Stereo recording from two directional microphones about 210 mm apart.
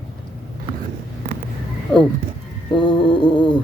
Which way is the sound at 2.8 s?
25° left (ahead or behind).